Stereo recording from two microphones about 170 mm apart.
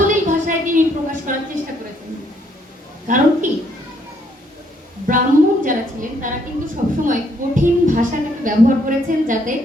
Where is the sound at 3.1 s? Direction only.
50° right (ahead or behind).